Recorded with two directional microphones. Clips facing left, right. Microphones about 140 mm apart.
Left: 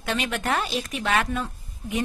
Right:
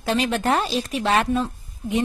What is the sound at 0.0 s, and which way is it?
Speech, 35° right (ahead or behind).